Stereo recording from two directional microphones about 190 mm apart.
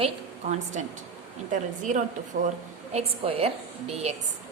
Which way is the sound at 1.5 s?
40° right (ahead or behind).